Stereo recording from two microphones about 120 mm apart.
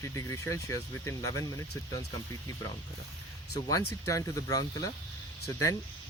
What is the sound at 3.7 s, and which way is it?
Speech, 25° left (ahead or behind).